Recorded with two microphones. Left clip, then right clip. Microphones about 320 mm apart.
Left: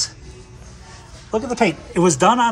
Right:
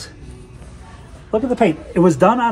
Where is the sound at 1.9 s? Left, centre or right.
Centre.